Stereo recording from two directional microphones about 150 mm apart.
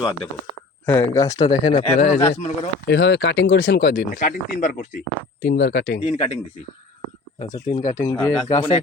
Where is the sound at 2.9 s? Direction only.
90° left.